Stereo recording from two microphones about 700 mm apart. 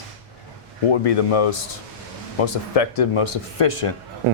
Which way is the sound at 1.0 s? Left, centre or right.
Left.